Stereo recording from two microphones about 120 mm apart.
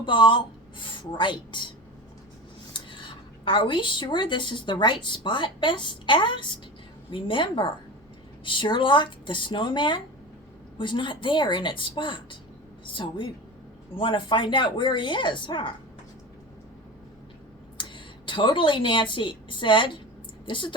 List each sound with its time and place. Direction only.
0.0 s speech: 40° left (ahead or behind)
2.7 s a woman's voice: 45° left (ahead or behind)
17.7 s a woman's voice: 40° left (ahead or behind)